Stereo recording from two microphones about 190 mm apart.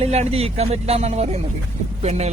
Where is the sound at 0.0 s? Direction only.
35° right (ahead or behind).